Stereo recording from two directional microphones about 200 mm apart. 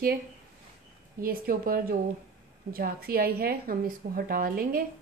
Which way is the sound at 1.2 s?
45° right (ahead or behind).